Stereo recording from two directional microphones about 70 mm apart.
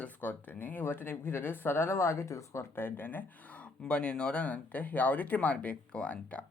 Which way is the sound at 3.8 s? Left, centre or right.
Centre.